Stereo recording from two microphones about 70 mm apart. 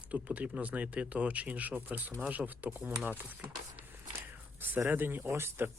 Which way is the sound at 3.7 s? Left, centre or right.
Right.